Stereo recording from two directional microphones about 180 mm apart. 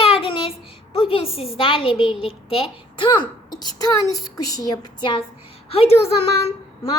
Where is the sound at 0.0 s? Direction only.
30° left (ahead or behind).